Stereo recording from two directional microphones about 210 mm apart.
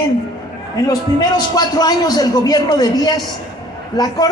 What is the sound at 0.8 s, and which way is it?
A man's voice, 20° left (ahead or behind).